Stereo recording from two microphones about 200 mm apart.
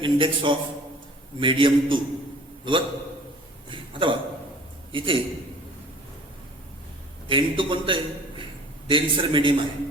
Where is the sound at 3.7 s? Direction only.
25° right (ahead or behind).